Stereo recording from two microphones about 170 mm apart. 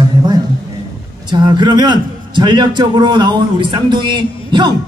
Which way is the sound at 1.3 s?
25° right (ahead or behind).